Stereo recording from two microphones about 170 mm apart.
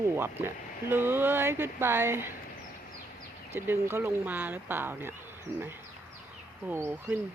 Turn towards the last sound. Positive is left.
turn(degrees=-10)  # may be behind; listen again after turning